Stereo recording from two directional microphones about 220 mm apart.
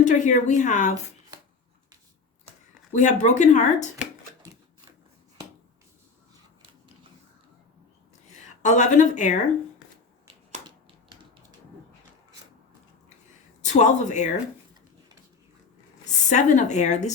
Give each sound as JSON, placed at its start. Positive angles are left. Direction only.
{"t": 0.0, "sound": "speech", "side_deg": 35}
{"t": 2.9, "sound": "speech", "side_deg": 35}
{"t": 8.3, "sound": "a woman's voice", "side_deg": 35}
{"t": 13.7, "sound": "speech", "side_deg": 35}
{"t": 16.3, "sound": "speech", "side_deg": 35}